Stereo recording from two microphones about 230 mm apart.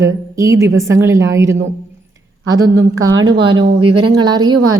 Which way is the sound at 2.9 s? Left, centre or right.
Right.